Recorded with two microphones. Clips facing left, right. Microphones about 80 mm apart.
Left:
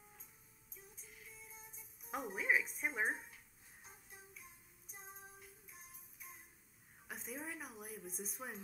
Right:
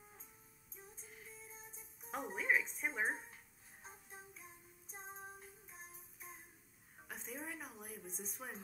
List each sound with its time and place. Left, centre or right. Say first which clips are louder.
0.9 s music: right 2 dB; right
2.0 s a woman's voice: even; centre
3.8 s child singing: right 5 dB; right
7.1 s a woman's voice: left 1 dB; centre